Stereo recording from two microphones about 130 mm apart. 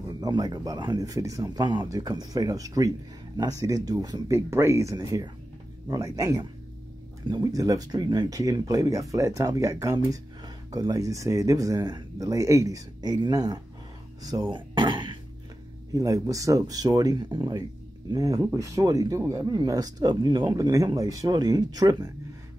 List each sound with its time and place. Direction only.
0.2 s speech: 35° right (ahead or behind)
15.9 s speech: 25° right (ahead or behind)